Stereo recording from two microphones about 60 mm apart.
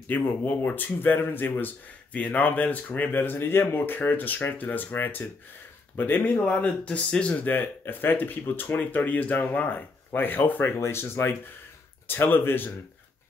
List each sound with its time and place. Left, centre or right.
0.1 s speech: left
6.3 s speech: centre
7.4 s speech: left
10.8 s speech: left